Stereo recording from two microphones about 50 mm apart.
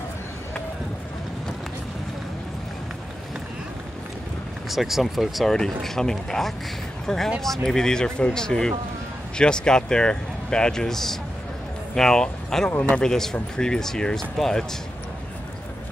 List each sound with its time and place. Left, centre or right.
4.6 s speech: centre
5.5 s speech: centre